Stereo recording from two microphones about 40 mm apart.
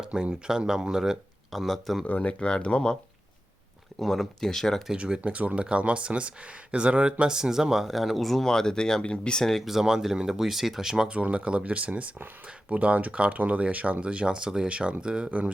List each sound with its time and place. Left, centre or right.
0.1 s speech: centre
1.5 s speech: centre
2.0 s speech: left
4.0 s speech: centre
4.9 s speech: right
5.2 s speech: right
7.3 s speech: centre
8.4 s speech: centre
9.4 s speech: centre
9.8 s speech: centre
11.1 s speech: right
15.3 s speech: right